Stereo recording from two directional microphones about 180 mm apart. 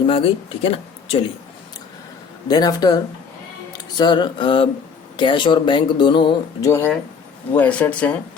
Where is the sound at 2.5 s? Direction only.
20° left (ahead or behind).